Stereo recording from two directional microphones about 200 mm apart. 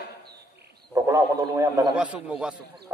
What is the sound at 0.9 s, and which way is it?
A man's voice, 15° right (ahead or behind).